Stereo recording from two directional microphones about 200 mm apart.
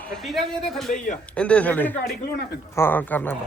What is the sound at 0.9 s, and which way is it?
Speech, 40° left (ahead or behind).